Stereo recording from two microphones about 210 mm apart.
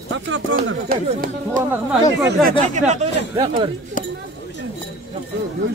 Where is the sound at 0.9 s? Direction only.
45° right (ahead or behind).